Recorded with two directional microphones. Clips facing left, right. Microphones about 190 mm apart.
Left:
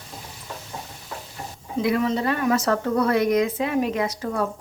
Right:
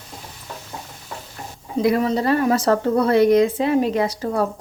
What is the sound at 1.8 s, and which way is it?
A woman's voice, 40° right (ahead or behind).